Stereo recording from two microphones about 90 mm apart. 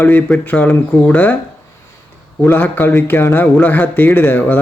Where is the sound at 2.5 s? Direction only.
20° left (ahead or behind).